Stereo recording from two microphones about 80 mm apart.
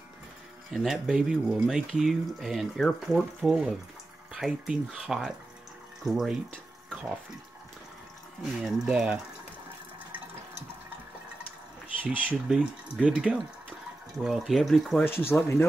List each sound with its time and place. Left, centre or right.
0.7 s speech: centre
8.4 s speech: centre
12.0 s speech: right
12.4 s speech: centre
15.0 s speech: left